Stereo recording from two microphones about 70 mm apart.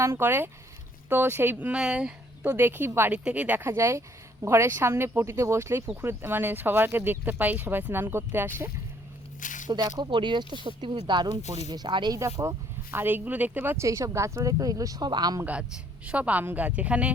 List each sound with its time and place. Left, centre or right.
0.0 s speech: right
1.8 s speech: centre
2.5 s speech: right
3.1 s speech: centre
3.6 s speech: right
9.6 s speech: right
12.2 s speech: right
13.7 s speech: right
16.0 s speech: centre